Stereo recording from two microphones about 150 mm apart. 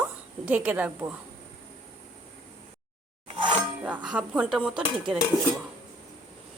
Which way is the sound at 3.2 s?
35° right (ahead or behind).